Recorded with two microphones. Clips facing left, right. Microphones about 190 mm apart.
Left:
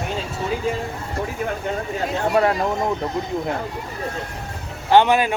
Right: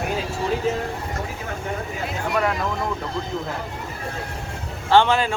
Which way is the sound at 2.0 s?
35° left (ahead or behind).